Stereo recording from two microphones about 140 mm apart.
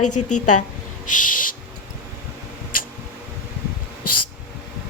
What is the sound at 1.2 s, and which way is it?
Owl, 75° left (ahead or behind).